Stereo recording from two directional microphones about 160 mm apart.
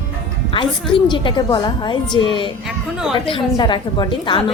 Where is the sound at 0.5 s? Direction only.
30° left (ahead or behind).